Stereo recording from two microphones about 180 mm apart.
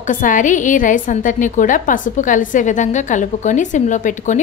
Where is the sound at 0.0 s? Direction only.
45° left (ahead or behind).